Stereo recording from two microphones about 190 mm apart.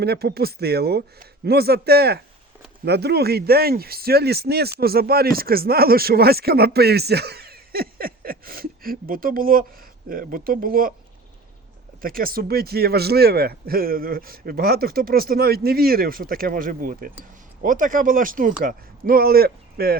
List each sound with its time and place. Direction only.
0.0 s speech: 55° right (ahead or behind)
12.0 s speech: 50° right (ahead or behind)